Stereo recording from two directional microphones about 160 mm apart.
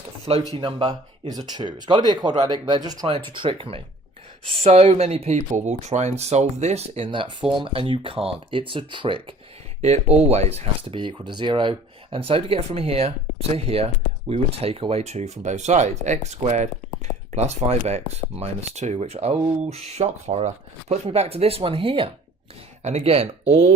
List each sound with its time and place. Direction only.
0.5 s speech: 30° right (ahead or behind)